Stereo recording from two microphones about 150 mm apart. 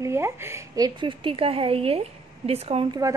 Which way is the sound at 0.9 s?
35° right (ahead or behind).